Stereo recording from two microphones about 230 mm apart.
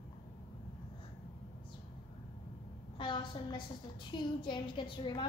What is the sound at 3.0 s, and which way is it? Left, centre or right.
A woman's voice, centre.